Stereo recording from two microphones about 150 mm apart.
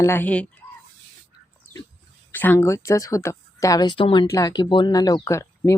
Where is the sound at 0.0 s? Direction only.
15° left (ahead or behind).